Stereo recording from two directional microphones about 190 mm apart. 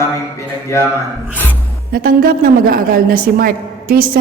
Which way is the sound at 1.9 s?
50° right (ahead or behind).